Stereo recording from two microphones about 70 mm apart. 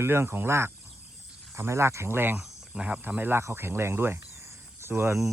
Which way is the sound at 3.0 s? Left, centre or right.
Right.